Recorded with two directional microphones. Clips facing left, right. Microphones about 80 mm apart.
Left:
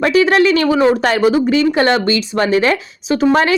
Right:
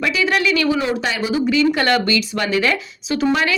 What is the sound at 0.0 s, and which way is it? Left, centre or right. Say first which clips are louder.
Speech: left 7 dB; left.